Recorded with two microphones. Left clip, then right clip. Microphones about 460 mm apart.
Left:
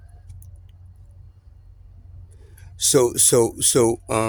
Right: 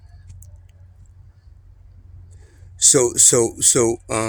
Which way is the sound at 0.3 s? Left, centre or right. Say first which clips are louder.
Right 2 dB; left.